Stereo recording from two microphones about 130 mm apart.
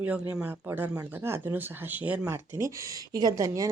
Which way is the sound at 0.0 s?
10° right (ahead or behind).